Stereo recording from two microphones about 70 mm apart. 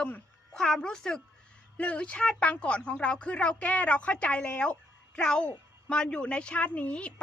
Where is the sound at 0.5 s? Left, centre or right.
Centre.